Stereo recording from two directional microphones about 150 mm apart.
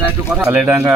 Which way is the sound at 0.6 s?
10° right (ahead or behind).